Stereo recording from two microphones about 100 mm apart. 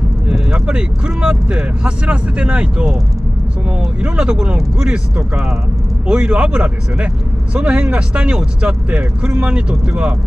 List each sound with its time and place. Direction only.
0.3 s speech: 10° right (ahead or behind)